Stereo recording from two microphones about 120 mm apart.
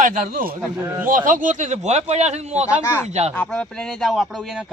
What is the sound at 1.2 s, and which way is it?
Speech, 90° right.